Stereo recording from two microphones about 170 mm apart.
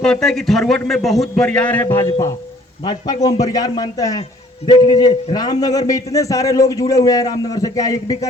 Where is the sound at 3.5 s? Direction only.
20° left (ahead or behind).